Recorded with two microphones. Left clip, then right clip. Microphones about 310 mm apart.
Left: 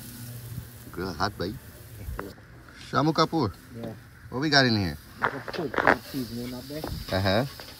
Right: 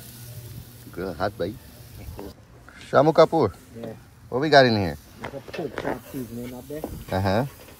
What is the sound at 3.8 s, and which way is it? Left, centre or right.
Speech, left.